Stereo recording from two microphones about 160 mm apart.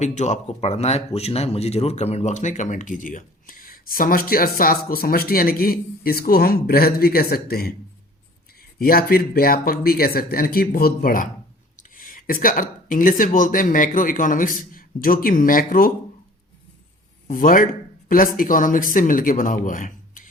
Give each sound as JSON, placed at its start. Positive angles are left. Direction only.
{"t": 0.0, "sound": "speech", "side_deg": 45}
{"t": 8.8, "sound": "speech", "side_deg": 70}
{"t": 17.2, "sound": "speech", "side_deg": 60}